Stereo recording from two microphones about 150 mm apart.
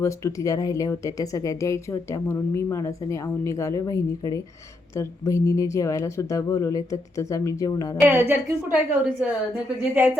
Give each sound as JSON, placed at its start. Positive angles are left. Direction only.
{"t": 0.0, "sound": "speech", "side_deg": 20}
{"t": 7.9, "sound": "a woman's voice", "side_deg": -15}